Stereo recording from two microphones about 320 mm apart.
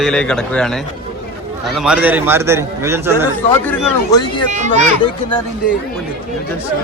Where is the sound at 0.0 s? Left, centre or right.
Centre.